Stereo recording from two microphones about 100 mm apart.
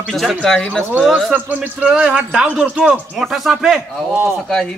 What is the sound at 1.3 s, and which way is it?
A man's voice, 15° right (ahead or behind).